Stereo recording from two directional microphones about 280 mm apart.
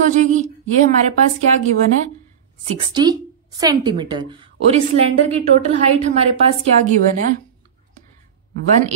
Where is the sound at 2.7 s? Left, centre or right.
Centre.